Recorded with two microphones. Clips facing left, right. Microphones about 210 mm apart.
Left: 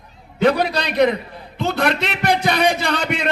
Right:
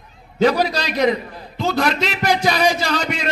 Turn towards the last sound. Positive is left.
turn(degrees=60)  # may be behind; listen again after turning